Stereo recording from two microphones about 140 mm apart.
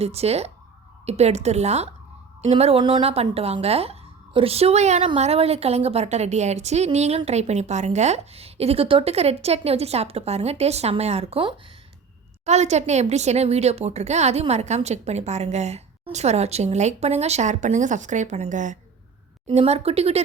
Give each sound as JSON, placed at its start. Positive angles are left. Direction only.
{"t": 0.0, "sound": "speech", "side_deg": -50}
{"t": 12.5, "sound": "speech", "side_deg": -55}
{"t": 19.5, "sound": "speech", "side_deg": -50}